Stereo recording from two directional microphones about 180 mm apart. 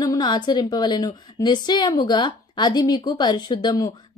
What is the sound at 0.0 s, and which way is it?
A woman's voice, 20° left (ahead or behind).